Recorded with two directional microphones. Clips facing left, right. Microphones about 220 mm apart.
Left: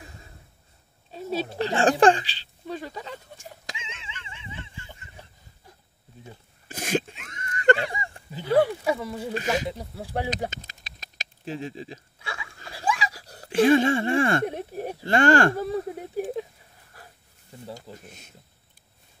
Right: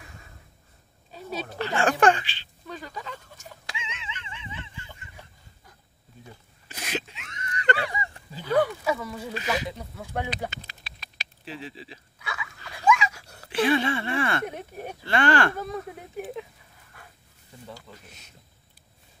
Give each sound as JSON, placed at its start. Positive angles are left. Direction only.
{"t": 1.1, "sound": "a sound", "side_deg": 25}
{"t": 6.7, "sound": "a sound", "side_deg": 50}
{"t": 8.3, "sound": "speech", "side_deg": 25}
{"t": 9.3, "sound": "speech", "side_deg": 45}
{"t": 9.7, "sound": "speech", "side_deg": 35}
{"t": 12.2, "sound": "a sound", "side_deg": 30}
{"t": 14.4, "sound": "speech", "side_deg": 30}
{"t": 15.0, "sound": "speech", "side_deg": 45}
{"t": 15.5, "sound": "speech", "side_deg": 30}
{"t": 17.0, "sound": "dog", "side_deg": 35}
{"t": 17.9, "sound": "speech", "side_deg": 50}